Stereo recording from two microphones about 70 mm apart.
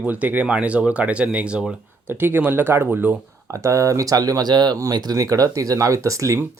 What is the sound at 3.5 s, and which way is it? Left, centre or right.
Speech, right.